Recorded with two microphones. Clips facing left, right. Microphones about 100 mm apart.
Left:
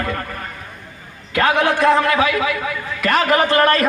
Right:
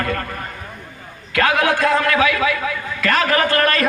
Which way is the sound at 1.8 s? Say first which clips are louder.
Left 4 dB; 25° left (ahead or behind).